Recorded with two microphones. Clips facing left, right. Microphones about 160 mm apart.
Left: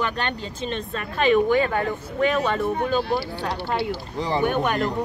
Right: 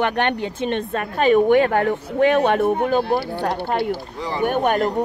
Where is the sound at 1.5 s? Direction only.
65° right (ahead or behind); by 4.9 s 45° right (ahead or behind).